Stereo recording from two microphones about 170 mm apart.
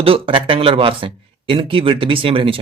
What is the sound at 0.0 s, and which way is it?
Speech, 35° right (ahead or behind).